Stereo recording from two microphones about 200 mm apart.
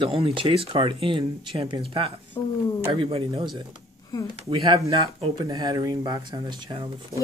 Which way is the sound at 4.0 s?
15° left (ahead or behind).